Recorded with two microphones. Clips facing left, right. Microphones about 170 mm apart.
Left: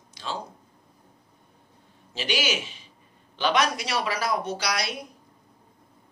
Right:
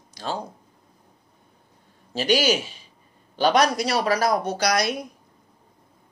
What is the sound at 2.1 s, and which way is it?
Speech, 40° right (ahead or behind).